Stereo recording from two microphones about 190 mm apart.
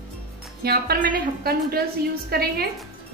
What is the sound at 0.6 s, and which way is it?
Speech, 55° right (ahead or behind).